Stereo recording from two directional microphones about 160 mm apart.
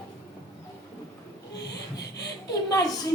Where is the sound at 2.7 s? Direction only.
20° left (ahead or behind).